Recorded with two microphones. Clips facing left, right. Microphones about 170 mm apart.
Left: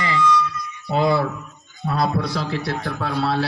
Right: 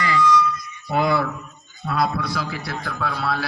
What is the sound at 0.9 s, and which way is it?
A man's voice, 25° left (ahead or behind).